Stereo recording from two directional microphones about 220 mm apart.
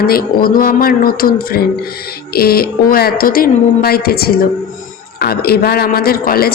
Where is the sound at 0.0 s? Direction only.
45° left (ahead or behind).